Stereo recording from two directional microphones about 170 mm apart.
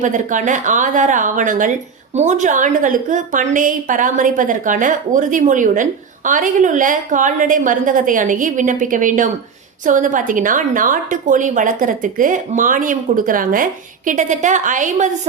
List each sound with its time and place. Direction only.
0.0 s a woman's voice: 50° right (ahead or behind)